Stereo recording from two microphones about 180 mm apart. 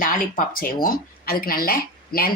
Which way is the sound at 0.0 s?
50° left (ahead or behind).